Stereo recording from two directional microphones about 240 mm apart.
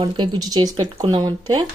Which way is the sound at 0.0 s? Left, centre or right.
Centre.